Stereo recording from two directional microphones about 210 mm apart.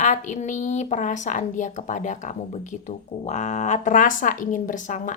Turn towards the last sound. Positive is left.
turn(degrees=35)  # may be behind; listen again after turning